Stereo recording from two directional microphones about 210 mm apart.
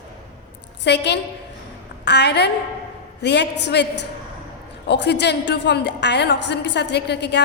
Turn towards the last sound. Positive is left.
turn(degrees=55)  # may be behind; listen again after turning